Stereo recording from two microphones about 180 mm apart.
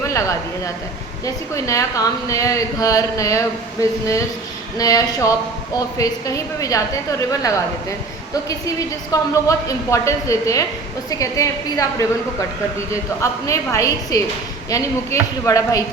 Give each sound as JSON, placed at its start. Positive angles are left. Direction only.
{"t": 0.0, "sound": "a woman's voice", "side_deg": 15}
{"t": 4.8, "sound": "a woman's voice", "side_deg": 20}